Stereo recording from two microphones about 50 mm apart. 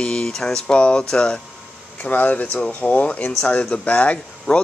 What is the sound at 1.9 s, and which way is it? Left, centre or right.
Speech, left.